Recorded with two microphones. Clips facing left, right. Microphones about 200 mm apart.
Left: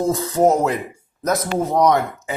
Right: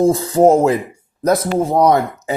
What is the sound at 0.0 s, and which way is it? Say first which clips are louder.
Speech: right 5 dB; 30° right (ahead or behind).